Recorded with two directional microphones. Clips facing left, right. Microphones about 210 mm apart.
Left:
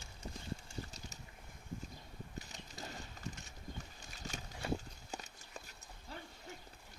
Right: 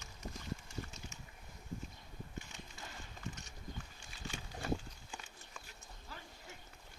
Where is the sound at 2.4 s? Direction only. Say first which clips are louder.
Left 2 dB; 40° left (ahead or behind).